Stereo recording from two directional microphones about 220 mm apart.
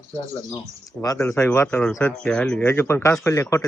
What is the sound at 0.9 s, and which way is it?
Speech, 15° left (ahead or behind).